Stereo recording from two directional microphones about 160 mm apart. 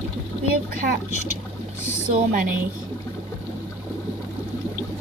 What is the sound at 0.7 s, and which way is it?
Speech, 60° right (ahead or behind).